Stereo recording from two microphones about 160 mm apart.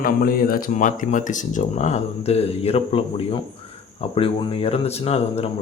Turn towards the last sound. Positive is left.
turn(degrees=40)  # may be behind; listen again after turning